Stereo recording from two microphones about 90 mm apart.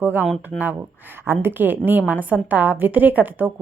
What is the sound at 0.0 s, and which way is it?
Speech, 20° right (ahead or behind).